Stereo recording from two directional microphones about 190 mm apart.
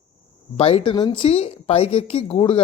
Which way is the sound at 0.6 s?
30° left (ahead or behind).